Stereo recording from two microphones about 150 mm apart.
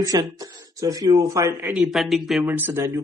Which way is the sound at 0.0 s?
25° right (ahead or behind).